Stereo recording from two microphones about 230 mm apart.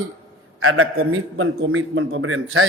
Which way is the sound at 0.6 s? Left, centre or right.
Right.